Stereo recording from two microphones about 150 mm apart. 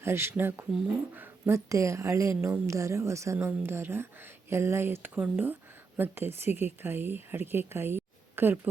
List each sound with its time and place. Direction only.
0.0 s speech: 15° right (ahead or behind)